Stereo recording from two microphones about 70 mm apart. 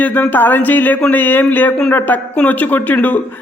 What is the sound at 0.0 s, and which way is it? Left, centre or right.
A man's voice, left.